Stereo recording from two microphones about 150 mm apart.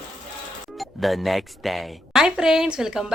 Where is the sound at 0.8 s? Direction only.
Centre (ahead or behind).